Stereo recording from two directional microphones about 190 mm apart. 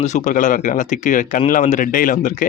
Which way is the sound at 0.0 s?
40° left (ahead or behind).